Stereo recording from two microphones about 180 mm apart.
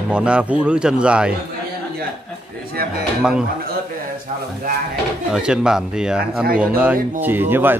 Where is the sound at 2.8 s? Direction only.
60° right (ahead or behind).